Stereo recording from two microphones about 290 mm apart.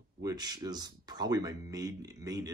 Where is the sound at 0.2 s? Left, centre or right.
Centre.